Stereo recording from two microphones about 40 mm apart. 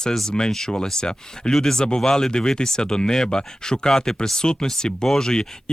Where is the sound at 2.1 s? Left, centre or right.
Centre.